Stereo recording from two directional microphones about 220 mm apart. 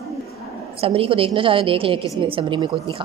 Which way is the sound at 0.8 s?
25° right (ahead or behind).